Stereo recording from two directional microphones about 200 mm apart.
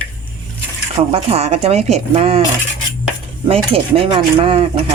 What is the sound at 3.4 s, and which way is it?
Speech, 30° right (ahead or behind).